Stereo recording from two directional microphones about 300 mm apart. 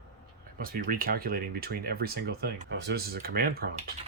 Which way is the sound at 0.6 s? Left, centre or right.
Right.